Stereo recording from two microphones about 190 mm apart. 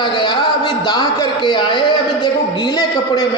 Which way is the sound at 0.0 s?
25° left (ahead or behind).